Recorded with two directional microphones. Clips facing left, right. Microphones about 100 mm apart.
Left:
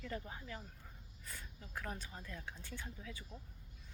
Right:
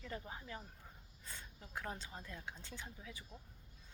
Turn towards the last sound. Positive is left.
turn(degrees=-15)  # may be behind; listen again after turning